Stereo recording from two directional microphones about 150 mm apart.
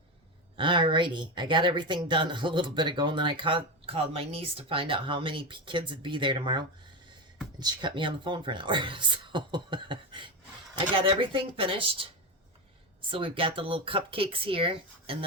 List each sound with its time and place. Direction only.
0.5 s speech: 35° right (ahead or behind)